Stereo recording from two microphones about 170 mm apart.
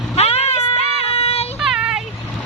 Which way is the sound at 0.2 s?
40° left (ahead or behind).